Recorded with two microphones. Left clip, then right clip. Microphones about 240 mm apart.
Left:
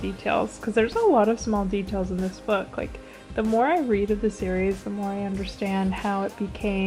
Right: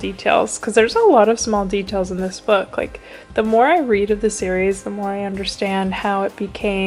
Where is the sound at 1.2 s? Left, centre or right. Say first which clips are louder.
Right 8 dB; centre.